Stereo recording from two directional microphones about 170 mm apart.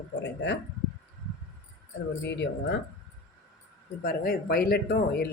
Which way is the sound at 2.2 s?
90° left.